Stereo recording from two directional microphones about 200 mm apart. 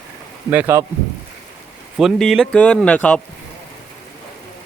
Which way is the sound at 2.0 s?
Centre (ahead or behind).